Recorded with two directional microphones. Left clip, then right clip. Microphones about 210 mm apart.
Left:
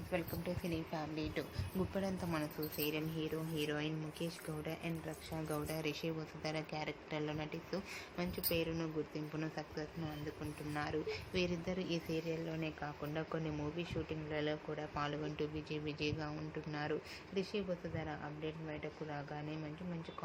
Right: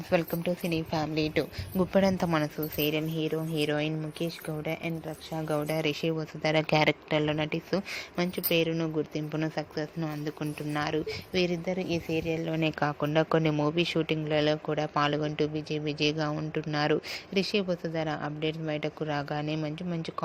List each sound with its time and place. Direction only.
0.1 s speech: 40° right (ahead or behind)
12.5 s speech: 50° right (ahead or behind)